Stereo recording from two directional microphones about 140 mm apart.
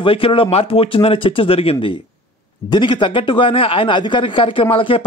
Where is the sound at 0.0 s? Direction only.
40° left (ahead or behind).